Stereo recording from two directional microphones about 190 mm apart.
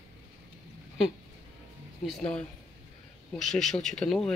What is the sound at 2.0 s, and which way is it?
Speech, centre (ahead or behind).